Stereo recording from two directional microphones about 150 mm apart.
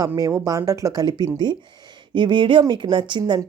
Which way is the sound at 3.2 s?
20° right (ahead or behind).